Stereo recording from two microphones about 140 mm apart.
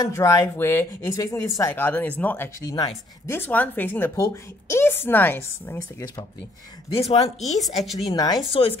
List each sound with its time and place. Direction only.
0.0 s a woman's voice: 25° left (ahead or behind)
6.9 s speech: 45° left (ahead or behind)
8.1 s speech: 25° left (ahead or behind)
8.5 s speech: 40° left (ahead or behind)